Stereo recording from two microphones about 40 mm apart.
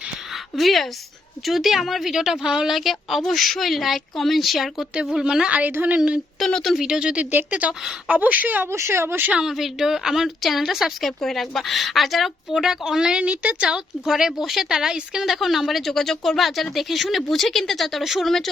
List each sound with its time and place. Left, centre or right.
0.5 s a woman's voice: centre
5.1 s speech: centre
5.5 s a woman's voice: right
6.4 s speech: centre
6.7 s speech: centre
7.6 s a woman's voice: right
8.6 s speech: right
9.4 s a woman's voice: centre
11.0 s a woman's voice: centre
13.2 s speech: right
14.1 s speech: centre
15.2 s a woman's voice: centre
15.9 s a woman's voice: centre
18.0 s speech: centre